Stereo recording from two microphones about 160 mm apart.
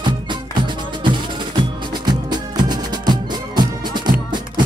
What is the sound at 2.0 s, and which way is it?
Music, 25° right (ahead or behind).